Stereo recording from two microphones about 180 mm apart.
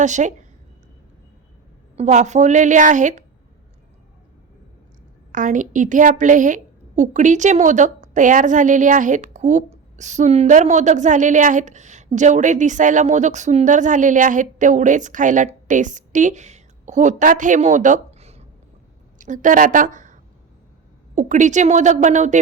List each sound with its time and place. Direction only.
0.0 s a woman's voice: 40° right (ahead or behind)
2.0 s a woman's voice: 40° right (ahead or behind)
5.3 s a woman's voice: 45° right (ahead or behind)
21.2 s a woman's voice: 45° right (ahead or behind)